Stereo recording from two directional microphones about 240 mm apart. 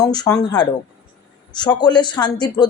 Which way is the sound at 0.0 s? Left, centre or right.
Centre.